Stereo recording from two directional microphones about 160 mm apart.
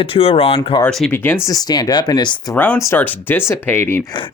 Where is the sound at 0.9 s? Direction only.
5° left (ahead or behind).